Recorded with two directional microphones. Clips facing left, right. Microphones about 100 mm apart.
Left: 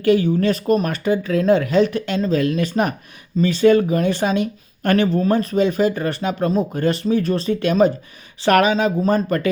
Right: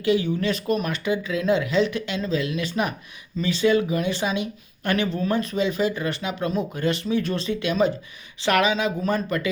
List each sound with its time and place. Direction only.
0.0 s speech: 45° left (ahead or behind)